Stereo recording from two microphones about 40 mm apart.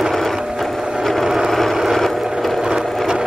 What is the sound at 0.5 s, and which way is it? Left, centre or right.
Wood, centre.